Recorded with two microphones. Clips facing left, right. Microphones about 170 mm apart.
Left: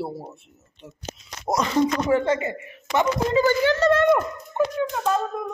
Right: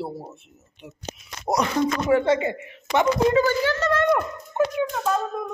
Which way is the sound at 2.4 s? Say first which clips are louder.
Right 3 dB; 20° right (ahead or behind).